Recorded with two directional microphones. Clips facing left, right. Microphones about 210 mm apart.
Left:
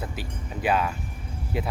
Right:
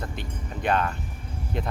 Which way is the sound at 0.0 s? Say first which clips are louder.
Even; 5° left (ahead or behind).